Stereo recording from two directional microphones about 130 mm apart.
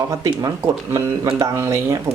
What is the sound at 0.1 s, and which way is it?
Speech, 30° right (ahead or behind).